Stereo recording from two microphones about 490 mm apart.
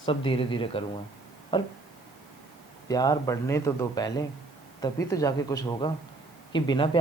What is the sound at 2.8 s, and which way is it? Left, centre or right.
A woman's voice, centre.